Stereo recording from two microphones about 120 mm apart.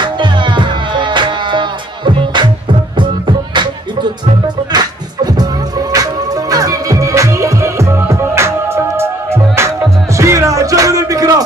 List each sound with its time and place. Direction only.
0.0 s music: 40° right (ahead or behind)
4.7 s music: 35° right (ahead or behind)